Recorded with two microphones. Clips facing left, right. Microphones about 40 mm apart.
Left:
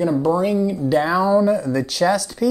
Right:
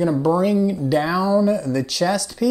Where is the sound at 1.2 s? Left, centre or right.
Left.